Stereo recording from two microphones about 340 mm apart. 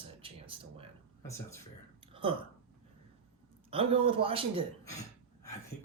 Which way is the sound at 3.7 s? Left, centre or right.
Centre.